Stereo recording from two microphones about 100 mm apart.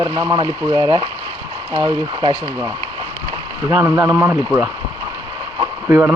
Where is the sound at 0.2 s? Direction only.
45° right (ahead or behind).